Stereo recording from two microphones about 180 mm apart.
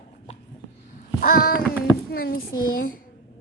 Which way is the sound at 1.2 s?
55° left (ahead or behind).